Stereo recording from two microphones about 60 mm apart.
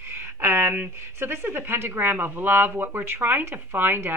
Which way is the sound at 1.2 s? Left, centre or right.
Right.